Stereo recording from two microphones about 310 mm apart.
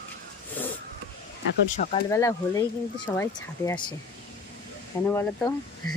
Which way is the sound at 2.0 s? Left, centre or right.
Centre.